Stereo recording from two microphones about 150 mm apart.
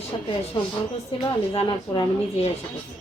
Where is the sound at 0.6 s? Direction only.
35° left (ahead or behind).